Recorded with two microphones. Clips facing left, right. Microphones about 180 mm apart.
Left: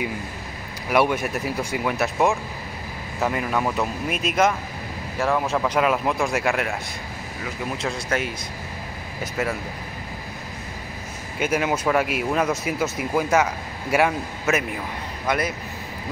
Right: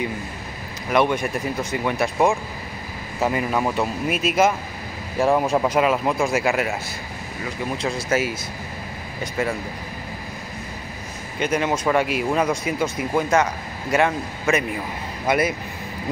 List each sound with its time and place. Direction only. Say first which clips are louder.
0.8 s speech: right 1 dB; 5° left (ahead or behind)
5.2 s speech: right 4 dB; 20° right (ahead or behind)
5.7 s speech: right 2 dB; 5° right (ahead or behind)
11.3 s speech: right 1 dB; 5° left (ahead or behind)
15.2 s speech: right 4 dB; 10° right (ahead or behind)